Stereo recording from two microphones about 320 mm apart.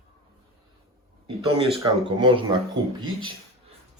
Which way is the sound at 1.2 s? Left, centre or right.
Centre.